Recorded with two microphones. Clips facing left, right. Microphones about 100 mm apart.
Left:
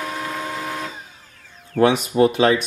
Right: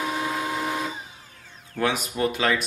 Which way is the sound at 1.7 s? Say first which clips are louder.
Left 9 dB; 30° left (ahead or behind).